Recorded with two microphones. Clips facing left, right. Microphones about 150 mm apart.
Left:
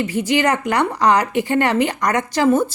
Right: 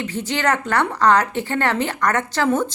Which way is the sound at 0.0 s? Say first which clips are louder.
Left 4 dB; 10° left (ahead or behind).